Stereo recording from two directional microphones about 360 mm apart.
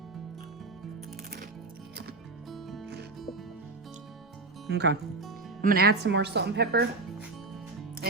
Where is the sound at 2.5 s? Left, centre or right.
Centre.